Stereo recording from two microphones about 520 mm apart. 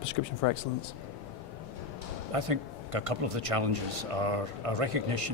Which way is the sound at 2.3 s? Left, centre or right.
Right.